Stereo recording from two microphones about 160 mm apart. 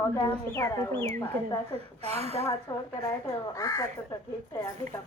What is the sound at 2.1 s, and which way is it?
Speech, 40° right (ahead or behind).